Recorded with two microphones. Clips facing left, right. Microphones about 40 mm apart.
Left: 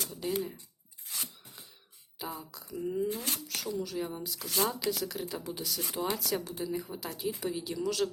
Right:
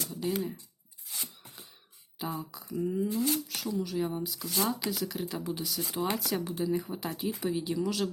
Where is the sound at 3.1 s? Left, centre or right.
Left.